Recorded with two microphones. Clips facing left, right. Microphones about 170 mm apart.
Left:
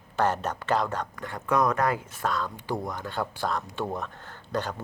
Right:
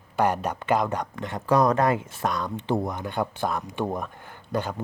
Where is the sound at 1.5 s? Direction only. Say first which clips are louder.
Right 4 dB; 35° right (ahead or behind).